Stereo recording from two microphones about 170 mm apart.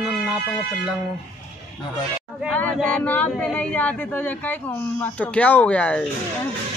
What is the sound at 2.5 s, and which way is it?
Speech, 10° left (ahead or behind).